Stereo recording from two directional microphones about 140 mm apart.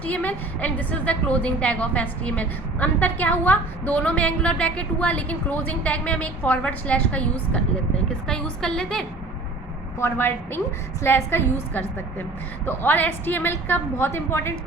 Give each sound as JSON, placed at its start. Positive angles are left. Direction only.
{"t": 0.0, "sound": "a woman's voice", "side_deg": 10}
{"t": 10.0, "sound": "a woman's voice", "side_deg": 15}